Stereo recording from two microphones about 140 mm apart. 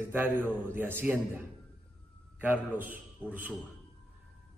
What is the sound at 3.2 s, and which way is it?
Speech, 10° left (ahead or behind).